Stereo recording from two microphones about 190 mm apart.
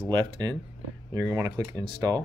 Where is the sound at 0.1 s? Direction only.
20° right (ahead or behind).